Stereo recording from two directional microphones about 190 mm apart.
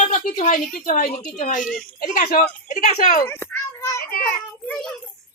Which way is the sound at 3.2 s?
10° left (ahead or behind).